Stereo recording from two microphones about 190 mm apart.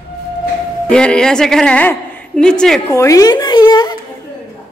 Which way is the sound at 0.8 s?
5° left (ahead or behind).